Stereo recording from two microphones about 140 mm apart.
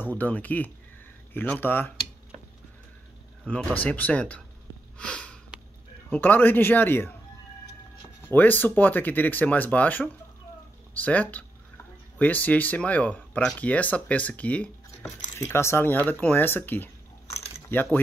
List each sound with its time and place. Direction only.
0.0 s speech: 10° left (ahead or behind)
3.7 s speech: 10° left (ahead or behind)
4.9 s sniff: 10° left (ahead or behind)
6.0 s speech: 15° left (ahead or behind)
8.2 s speech: 15° left (ahead or behind)